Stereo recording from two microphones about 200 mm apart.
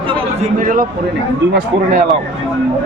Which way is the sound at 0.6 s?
40° right (ahead or behind).